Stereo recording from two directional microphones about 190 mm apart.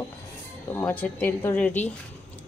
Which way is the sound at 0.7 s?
10° left (ahead or behind).